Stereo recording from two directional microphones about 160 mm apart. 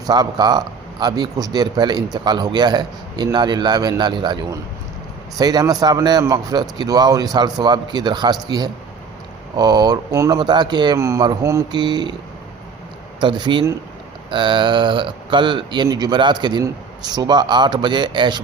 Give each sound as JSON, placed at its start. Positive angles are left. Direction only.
{"t": 0.0, "sound": "speech", "side_deg": -25}
{"t": 5.4, "sound": "speech", "side_deg": -25}
{"t": 13.1, "sound": "speech", "side_deg": -30}